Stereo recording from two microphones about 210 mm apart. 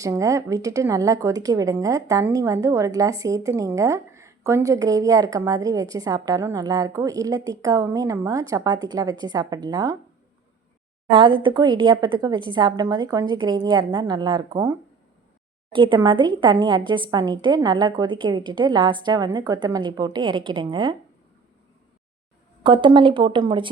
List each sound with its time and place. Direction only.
0.0 s speech: 15° right (ahead or behind)
11.1 s a woman's voice: 25° right (ahead or behind)
22.6 s a woman's voice: 20° right (ahead or behind)